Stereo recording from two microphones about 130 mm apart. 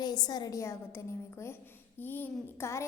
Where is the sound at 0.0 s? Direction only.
30° left (ahead or behind).